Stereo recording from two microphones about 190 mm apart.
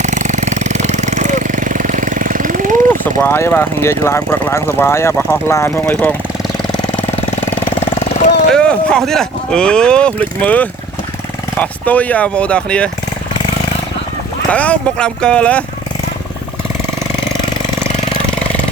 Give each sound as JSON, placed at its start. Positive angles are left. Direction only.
{"t": 0.0, "sound": "jackhammer", "side_deg": -40}
{"t": 3.2, "sound": "speech", "side_deg": 10}
{"t": 7.6, "sound": "engine", "side_deg": 30}
{"t": 8.5, "sound": "speech", "side_deg": 5}
{"t": 14.5, "sound": "speech", "side_deg": 5}